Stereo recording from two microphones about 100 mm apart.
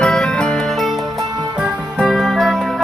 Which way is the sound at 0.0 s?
10° left (ahead or behind).